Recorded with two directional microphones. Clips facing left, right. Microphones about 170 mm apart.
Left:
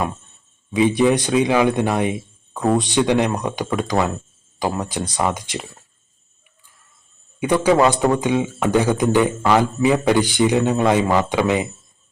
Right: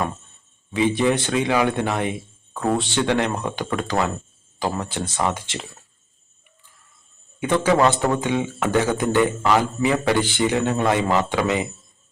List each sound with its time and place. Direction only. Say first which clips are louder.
0.7 s a man's voice: left 4 dB; 15° left (ahead or behind)
7.3 s a man's voice: left 3 dB; 15° left (ahead or behind)